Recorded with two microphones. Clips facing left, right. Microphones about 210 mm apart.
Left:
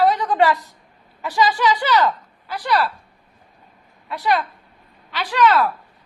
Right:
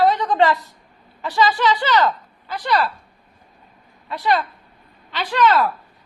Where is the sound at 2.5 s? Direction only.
5° left (ahead or behind).